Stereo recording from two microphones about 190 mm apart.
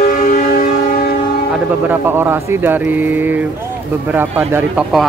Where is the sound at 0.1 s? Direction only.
45° left (ahead or behind).